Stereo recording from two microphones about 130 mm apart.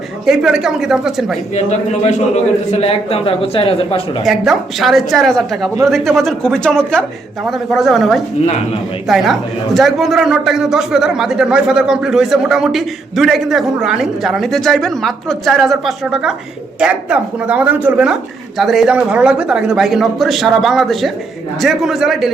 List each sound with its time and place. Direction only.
0.3 s a man's voice: 5° right (ahead or behind)
1.5 s a man's voice: 60° left (ahead or behind); by 4.0 s 45° left (ahead or behind)
4.2 s a man's voice: centre (ahead or behind)